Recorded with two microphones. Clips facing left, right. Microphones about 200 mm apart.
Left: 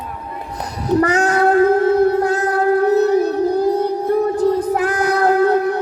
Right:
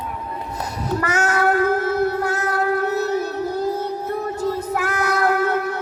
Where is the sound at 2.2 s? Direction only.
35° left (ahead or behind).